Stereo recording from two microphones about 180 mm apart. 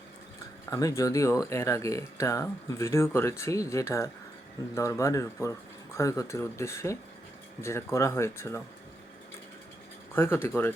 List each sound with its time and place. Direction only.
0.6 s speech: 20° left (ahead or behind)
10.2 s speech: 15° left (ahead or behind)